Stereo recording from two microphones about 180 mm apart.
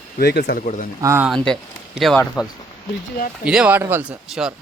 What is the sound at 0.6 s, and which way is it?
Speech, 45° left (ahead or behind).